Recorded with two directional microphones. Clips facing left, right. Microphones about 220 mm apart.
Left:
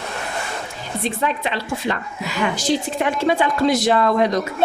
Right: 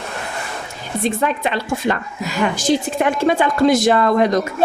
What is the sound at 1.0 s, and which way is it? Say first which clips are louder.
A woman's voice: right 4 dB; 50° right (ahead or behind).